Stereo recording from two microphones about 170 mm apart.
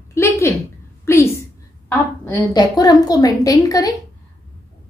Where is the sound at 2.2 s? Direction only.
20° left (ahead or behind).